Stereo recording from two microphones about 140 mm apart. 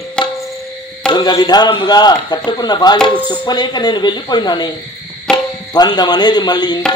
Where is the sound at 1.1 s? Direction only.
30° left (ahead or behind).